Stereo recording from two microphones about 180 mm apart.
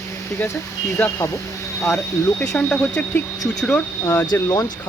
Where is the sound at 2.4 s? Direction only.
10° left (ahead or behind).